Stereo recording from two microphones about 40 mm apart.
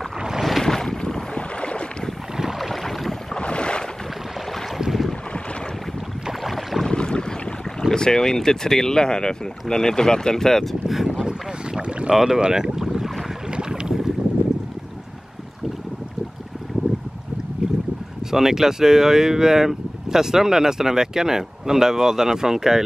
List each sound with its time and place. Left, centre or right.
0.4 s boat: centre
0.7 s boat: centre
1.3 s boat: left
2.6 s boat: centre
3.3 s boat: left
6.4 s boat: centre
6.9 s boat: left
7.9 s speech: centre
11.2 s boat: centre
12.1 s speech: centre
12.4 s boat: centre
13.5 s boat: right
17.6 s boat: centre
18.3 s speech: centre